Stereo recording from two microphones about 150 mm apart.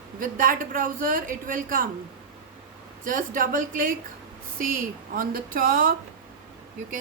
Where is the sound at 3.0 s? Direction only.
60° right (ahead or behind).